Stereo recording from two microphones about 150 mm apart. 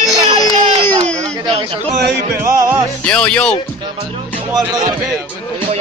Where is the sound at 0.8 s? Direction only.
50° right (ahead or behind).